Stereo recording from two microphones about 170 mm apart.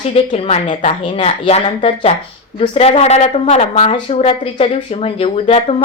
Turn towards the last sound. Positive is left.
turn(degrees=35)  # may be behind; listen again after turning